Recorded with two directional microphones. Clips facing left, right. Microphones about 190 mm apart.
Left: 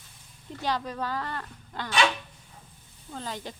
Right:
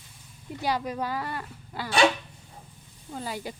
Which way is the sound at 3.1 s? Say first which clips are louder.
Right 2 dB; 10° right (ahead or behind).